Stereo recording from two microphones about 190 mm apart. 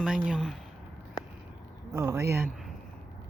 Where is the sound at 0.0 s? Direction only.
5° right (ahead or behind).